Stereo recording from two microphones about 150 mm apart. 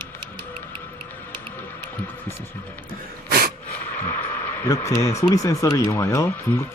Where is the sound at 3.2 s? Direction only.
90° right.